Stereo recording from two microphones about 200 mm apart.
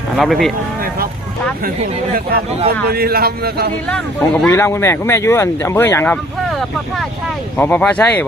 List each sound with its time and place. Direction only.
0.2 s speech: centre (ahead or behind)
2.9 s speech: 50° right (ahead or behind)
3.8 s speech: 5° left (ahead or behind)
6.5 s speech: centre (ahead or behind)